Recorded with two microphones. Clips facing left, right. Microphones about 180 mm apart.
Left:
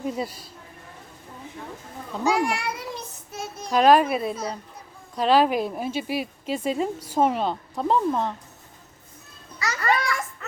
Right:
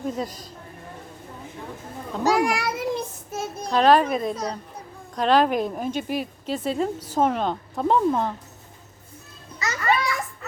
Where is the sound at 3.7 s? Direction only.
10° left (ahead or behind).